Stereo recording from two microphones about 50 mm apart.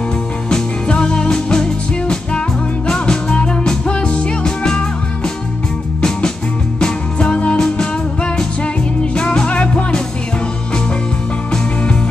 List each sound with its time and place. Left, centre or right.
0.5 s music: centre
5.9 s music: centre
11.5 s music: centre